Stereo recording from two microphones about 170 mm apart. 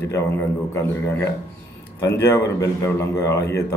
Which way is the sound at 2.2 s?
15° left (ahead or behind).